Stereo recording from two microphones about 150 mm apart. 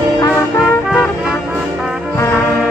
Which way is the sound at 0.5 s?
Centre (ahead or behind).